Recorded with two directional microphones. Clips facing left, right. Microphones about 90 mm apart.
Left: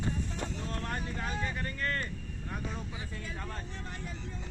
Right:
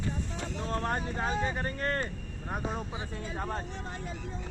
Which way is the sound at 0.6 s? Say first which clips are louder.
Right 5 dB; 35° right (ahead or behind).